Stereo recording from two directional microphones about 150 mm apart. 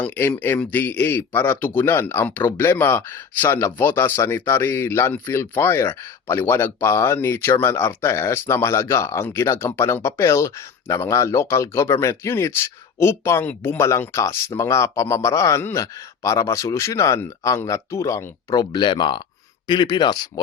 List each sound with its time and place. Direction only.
0.0 s a man's voice: 15° left (ahead or behind)